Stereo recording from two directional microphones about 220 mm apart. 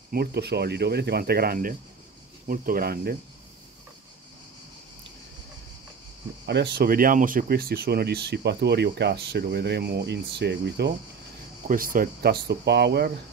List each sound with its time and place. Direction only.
0.1 s speech: 45° right (ahead or behind)
6.4 s speech: 50° right (ahead or behind)
11.6 s speech: 40° right (ahead or behind)